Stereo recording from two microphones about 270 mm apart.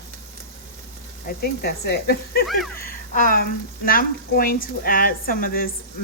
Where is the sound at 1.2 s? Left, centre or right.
Left.